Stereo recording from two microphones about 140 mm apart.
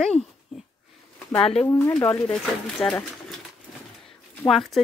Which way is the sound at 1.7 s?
20° left (ahead or behind).